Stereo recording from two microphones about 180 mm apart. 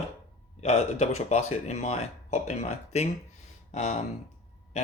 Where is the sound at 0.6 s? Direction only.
35° left (ahead or behind).